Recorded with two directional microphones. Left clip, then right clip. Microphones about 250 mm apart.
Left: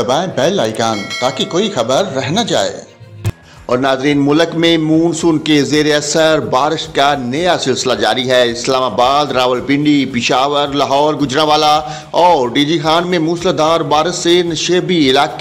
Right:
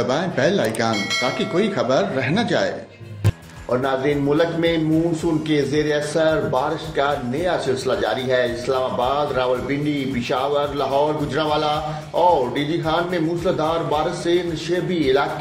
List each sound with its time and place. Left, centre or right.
0.0 s speech: left
3.8 s a man's voice: left